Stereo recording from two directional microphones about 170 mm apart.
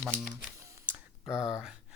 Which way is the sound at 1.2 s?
Centre (ahead or behind).